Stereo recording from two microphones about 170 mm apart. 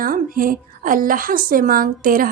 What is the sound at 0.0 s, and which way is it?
A woman's voice, 55° right (ahead or behind).